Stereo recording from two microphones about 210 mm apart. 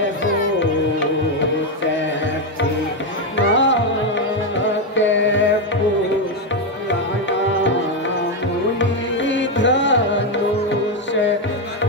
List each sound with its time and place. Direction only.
3.3 s music: 60° left (ahead or behind)
4.9 s music: 60° left (ahead or behind)
8.7 s music: 60° left (ahead or behind)